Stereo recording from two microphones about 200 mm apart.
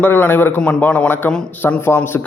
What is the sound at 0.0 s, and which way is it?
A man's voice, 10° left (ahead or behind).